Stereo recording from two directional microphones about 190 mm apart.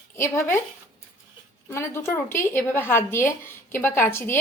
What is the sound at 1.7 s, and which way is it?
A woman's voice, 15° left (ahead or behind).